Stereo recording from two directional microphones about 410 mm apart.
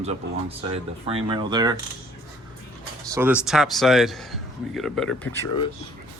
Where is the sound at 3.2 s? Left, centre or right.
Centre.